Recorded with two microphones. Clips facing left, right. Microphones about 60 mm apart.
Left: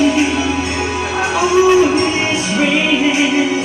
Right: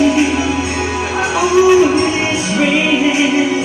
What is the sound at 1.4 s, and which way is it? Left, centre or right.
Music, centre.